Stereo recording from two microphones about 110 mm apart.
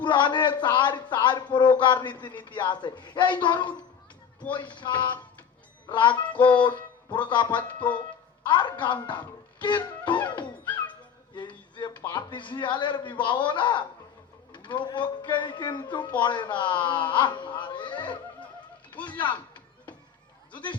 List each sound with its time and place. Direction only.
0.0 s a man's voice: 45° left (ahead or behind)
11.3 s a man's voice: 45° left (ahead or behind)